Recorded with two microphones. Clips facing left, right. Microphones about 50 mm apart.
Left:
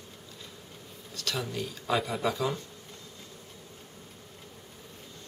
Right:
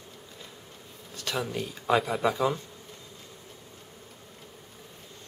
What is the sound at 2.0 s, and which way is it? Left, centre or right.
Speech, centre.